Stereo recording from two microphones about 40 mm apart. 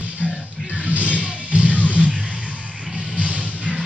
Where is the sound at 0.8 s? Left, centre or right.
Right.